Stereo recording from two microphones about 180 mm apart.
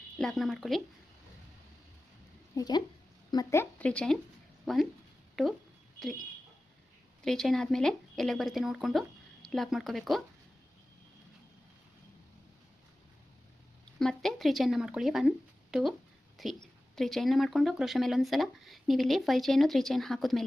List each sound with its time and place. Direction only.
0.2 s speech: centre (ahead or behind)
2.6 s speech: 20° left (ahead or behind); by 5.5 s centre (ahead or behind)
7.3 s speech: centre (ahead or behind)
14.0 s speech: centre (ahead or behind)